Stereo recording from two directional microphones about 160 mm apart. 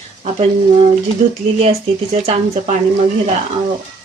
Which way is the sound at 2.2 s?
45° right (ahead or behind).